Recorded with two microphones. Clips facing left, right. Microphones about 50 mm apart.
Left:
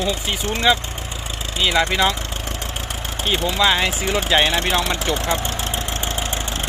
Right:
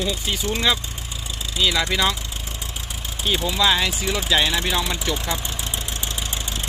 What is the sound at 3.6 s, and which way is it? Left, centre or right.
Speech, left.